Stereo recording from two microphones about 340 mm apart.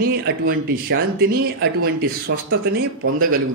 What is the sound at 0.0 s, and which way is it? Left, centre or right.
A man's voice, right.